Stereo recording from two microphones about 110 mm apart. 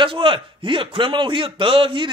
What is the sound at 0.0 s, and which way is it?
Speech, 50° right (ahead or behind).